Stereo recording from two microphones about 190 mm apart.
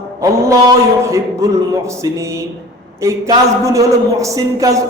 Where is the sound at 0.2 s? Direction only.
15° right (ahead or behind).